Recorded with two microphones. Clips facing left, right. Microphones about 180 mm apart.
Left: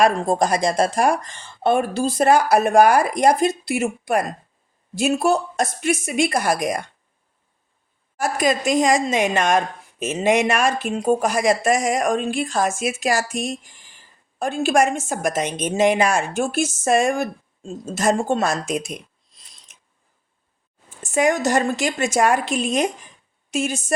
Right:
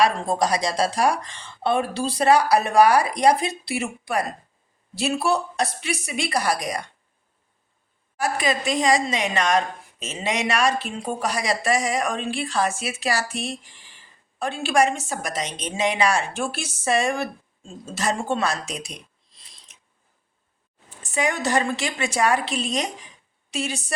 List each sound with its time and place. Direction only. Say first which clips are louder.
0.0 s a woman's voice: left 3 dB; 50° left (ahead or behind)
8.2 s a woman's voice: left 4 dB; 45° left (ahead or behind)
21.0 s a woman's voice: left 6 dB; 45° left (ahead or behind)